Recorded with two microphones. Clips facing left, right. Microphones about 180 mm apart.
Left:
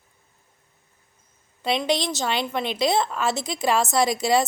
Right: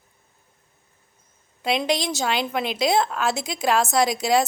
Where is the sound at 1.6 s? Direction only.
Centre (ahead or behind).